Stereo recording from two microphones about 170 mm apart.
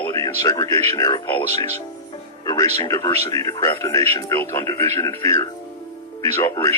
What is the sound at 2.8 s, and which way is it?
A man's voice, 20° left (ahead or behind).